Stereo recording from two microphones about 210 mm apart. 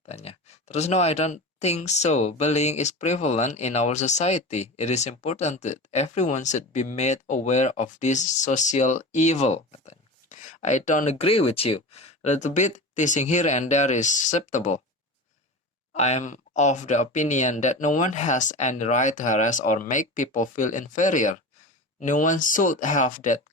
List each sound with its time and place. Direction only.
0.1 s speech: 30° left (ahead or behind)
15.9 s speech: 35° left (ahead or behind)